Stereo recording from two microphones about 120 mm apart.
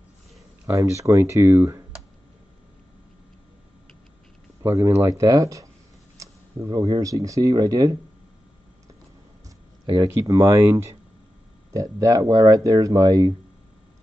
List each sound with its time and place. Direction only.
0.7 s speech: 25° right (ahead or behind)
4.6 s speech: 25° right (ahead or behind)
10.0 s speech: 25° right (ahead or behind)